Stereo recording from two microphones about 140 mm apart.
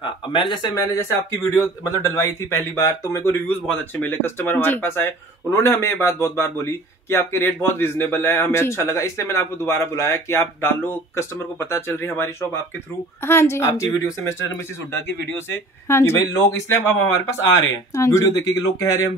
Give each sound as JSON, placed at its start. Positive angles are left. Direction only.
{"t": 0.0, "sound": "speech", "side_deg": 35}
{"t": 0.9, "sound": "speech", "side_deg": 20}